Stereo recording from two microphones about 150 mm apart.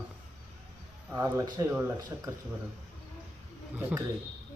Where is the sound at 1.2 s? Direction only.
20° right (ahead or behind).